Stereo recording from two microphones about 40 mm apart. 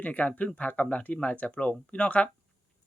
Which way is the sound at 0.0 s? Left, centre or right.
Left.